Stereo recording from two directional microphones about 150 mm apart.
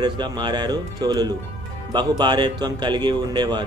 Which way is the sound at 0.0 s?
30° right (ahead or behind).